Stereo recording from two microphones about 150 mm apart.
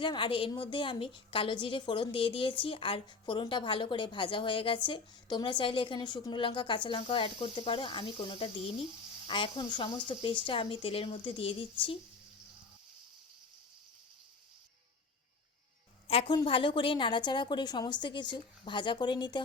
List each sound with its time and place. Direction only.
0.0 s a woman's voice: 35° left (ahead or behind)
16.0 s a woman's voice: 40° left (ahead or behind)